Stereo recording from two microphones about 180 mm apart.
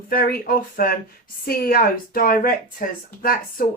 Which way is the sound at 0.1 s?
55° left (ahead or behind).